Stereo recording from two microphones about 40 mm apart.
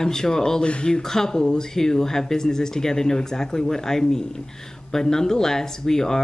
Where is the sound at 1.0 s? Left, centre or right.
Centre.